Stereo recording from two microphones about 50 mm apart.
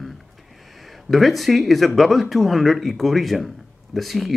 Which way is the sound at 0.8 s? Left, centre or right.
Centre.